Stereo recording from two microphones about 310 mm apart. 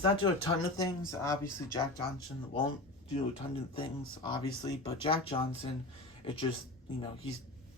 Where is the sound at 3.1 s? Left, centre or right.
Centre.